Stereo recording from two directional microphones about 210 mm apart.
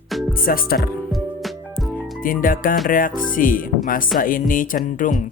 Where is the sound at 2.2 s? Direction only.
40° left (ahead or behind).